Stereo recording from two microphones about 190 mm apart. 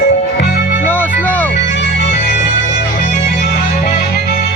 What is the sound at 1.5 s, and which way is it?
Music, 65° left (ahead or behind).